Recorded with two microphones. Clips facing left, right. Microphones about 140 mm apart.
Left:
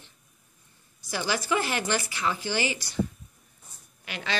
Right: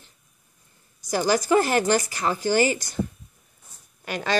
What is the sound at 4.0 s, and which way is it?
Speech, 45° right (ahead or behind).